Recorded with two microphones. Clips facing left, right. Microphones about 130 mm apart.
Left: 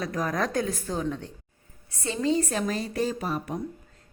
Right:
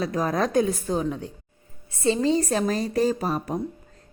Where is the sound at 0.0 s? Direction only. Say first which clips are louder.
Right 4 dB; 25° right (ahead or behind).